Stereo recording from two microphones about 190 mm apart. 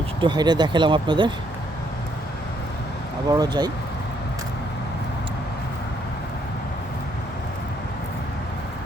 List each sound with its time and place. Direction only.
0.2 s speech: 25° right (ahead or behind)
3.3 s speech: 20° right (ahead or behind)